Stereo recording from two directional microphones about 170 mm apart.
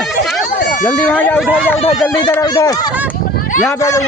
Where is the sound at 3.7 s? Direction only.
15° left (ahead or behind).